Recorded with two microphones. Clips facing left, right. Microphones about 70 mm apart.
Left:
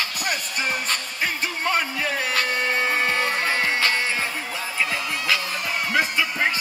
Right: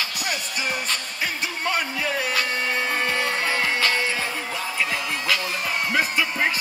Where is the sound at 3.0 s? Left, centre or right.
Left.